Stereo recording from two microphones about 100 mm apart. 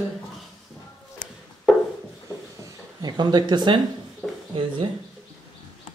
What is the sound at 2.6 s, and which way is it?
Speech, 45° right (ahead or behind).